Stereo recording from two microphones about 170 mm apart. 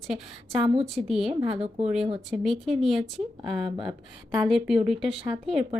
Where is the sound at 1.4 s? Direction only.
35° right (ahead or behind).